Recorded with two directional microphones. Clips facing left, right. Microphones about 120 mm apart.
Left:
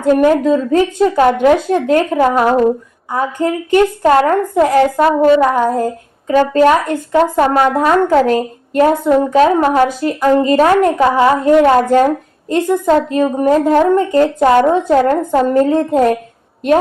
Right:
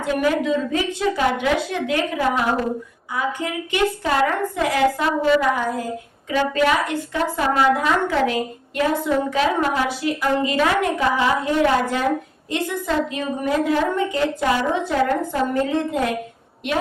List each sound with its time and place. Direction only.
0.2 s a woman's voice: 40° left (ahead or behind)